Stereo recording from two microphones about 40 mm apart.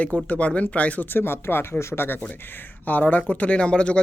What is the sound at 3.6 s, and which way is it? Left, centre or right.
Speech, left.